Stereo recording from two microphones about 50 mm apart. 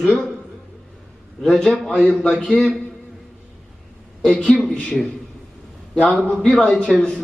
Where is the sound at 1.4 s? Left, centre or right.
Centre.